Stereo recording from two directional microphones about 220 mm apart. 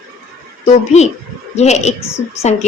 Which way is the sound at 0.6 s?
30° left (ahead or behind).